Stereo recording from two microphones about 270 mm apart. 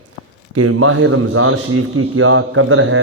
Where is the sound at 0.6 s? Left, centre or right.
Right.